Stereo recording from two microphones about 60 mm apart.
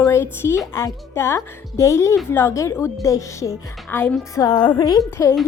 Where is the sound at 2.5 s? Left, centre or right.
Left.